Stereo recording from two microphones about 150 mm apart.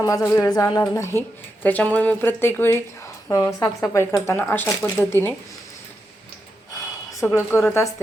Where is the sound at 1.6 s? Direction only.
10° left (ahead or behind).